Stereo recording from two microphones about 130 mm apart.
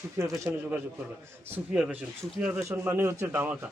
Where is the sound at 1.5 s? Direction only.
10° right (ahead or behind).